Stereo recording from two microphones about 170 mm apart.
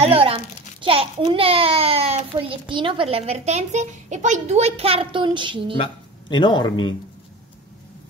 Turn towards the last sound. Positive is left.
turn(degrees=25)  # may be behind; listen again after turning